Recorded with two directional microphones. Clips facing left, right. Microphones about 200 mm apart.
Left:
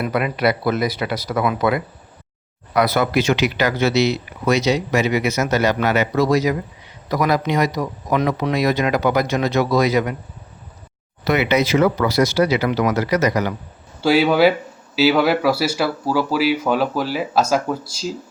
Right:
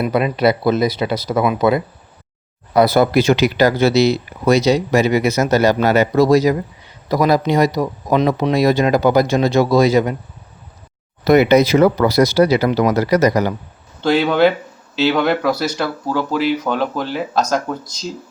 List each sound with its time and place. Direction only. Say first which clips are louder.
0.0 s speech: right 4 dB; 25° right (ahead or behind)
11.3 s speech: right 6 dB; 40° right (ahead or behind)
14.0 s speech: even; 5° left (ahead or behind)